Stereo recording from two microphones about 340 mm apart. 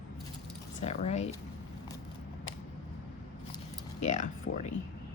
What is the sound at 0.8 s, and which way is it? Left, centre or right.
Speech, centre.